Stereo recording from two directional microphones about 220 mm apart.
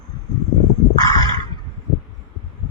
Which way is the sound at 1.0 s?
15° left (ahead or behind).